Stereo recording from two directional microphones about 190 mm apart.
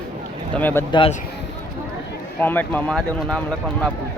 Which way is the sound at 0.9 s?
25° left (ahead or behind).